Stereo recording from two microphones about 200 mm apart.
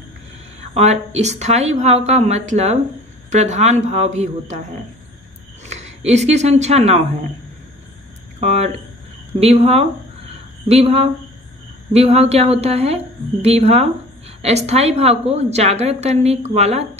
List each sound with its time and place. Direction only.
0.7 s a woman's voice: 35° right (ahead or behind)
5.7 s speech: 35° right (ahead or behind)
8.4 s a woman's voice: 35° right (ahead or behind)